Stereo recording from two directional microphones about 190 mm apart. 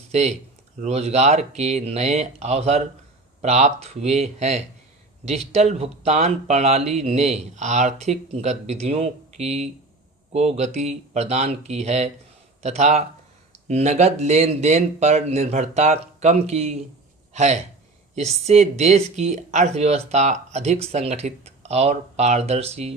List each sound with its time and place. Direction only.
0.1 s speech: 35° right (ahead or behind)